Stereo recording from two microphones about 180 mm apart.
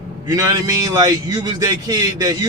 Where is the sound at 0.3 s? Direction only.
20° right (ahead or behind).